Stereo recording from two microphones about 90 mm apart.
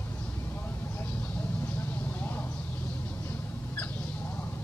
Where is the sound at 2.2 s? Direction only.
25° left (ahead or behind).